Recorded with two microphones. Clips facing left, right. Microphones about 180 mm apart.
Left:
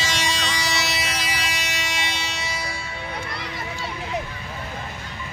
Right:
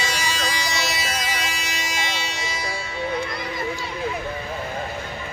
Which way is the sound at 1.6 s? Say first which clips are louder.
Even; 75° left (ahead or behind).